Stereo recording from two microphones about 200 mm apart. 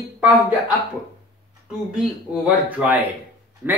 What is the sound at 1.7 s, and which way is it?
Speech, 5° right (ahead or behind).